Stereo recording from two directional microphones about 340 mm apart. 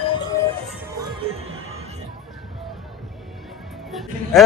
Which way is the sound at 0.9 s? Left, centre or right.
Centre.